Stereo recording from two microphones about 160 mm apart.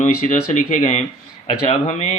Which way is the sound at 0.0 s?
45° left (ahead or behind).